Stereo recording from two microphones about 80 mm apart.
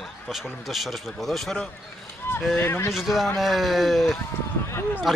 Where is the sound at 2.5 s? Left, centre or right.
Left.